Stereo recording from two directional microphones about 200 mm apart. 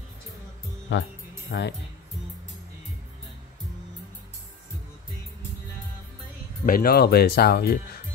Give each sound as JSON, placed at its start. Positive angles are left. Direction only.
{"t": 0.9, "sound": "speech", "side_deg": 65}
{"t": 6.6, "sound": "speech", "side_deg": 45}